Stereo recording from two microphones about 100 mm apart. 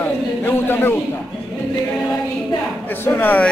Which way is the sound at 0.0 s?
20° left (ahead or behind).